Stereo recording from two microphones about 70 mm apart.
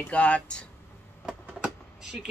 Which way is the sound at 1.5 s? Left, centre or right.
Centre.